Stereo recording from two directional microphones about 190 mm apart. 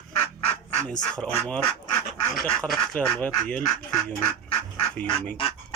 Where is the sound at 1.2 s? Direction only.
5° left (ahead or behind).